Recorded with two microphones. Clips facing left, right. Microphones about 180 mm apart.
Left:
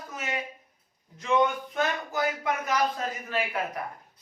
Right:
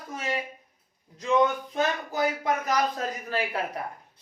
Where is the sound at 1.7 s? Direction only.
35° right (ahead or behind).